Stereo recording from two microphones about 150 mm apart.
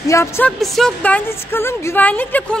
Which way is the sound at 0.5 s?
Centre (ahead or behind).